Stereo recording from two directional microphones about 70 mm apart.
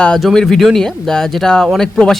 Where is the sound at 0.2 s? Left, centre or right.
Centre.